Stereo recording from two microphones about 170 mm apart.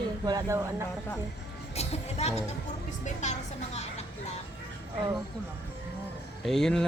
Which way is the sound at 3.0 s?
45° left (ahead or behind).